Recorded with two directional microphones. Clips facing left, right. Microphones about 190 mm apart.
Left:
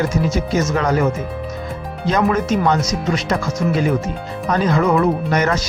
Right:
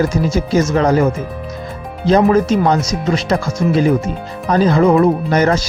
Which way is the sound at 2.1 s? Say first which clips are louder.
Right 6 dB; 30° right (ahead or behind).